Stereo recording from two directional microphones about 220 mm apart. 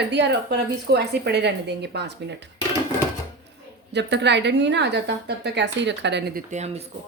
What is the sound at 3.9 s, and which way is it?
Speech, 50° right (ahead or behind).